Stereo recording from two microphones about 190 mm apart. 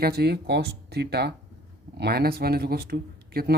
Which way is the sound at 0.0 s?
55° right (ahead or behind).